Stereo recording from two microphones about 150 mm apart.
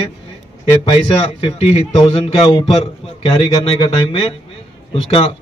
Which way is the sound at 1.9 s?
30° left (ahead or behind).